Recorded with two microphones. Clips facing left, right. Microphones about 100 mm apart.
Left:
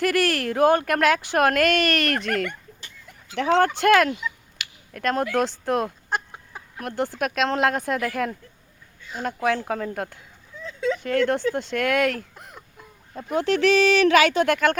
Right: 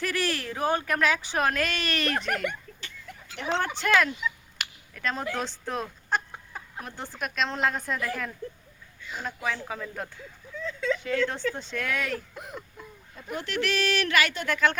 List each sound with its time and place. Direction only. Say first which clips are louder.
0.0 s speech: left 7 dB; 60° left (ahead or behind)
2.1 s speech: left 3 dB; 15° right (ahead or behind)
3.4 s speech: left 9 dB; 90° left
3.8 s speech: left 6 dB; 60° left (ahead or behind)
4.2 s a sound: even; centre (ahead or behind)
4.6 s a sound: right 1 dB; 45° right (ahead or behind)
4.9 s speech: left 8 dB; 65° left (ahead or behind)
6.1 s chicken: left 1 dB; 5° left (ahead or behind)
6.8 s speech: left 11 dB; 70° left (ahead or behind)
10.6 s a sound: left 3 dB; 20° left (ahead or behind)
11.0 s speech: left 6 dB; 60° left (ahead or behind); by 12.2 s 75° left (ahead or behind)
12.3 s a sound: right 4 dB; centre (ahead or behind)
13.3 s speech: left 10 dB; 90° left; by 14.8 s 60° left (ahead or behind)